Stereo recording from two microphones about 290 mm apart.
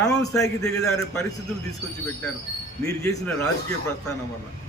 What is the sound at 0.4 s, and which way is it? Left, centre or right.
Speech, centre.